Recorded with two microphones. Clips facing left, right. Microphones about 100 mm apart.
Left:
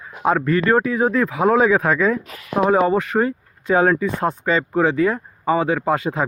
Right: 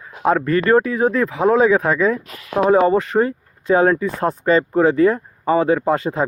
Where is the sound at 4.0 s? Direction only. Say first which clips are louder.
Right 1 dB; 35° right (ahead or behind).